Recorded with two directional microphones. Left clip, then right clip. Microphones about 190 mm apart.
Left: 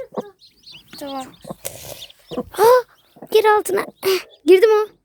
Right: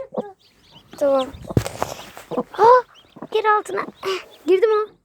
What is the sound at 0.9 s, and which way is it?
Speech, 10° right (ahead or behind).